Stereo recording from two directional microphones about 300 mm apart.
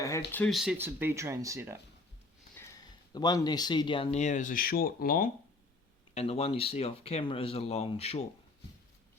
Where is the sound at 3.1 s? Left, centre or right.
Centre.